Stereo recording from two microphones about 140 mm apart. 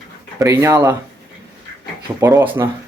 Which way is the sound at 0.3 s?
20° right (ahead or behind).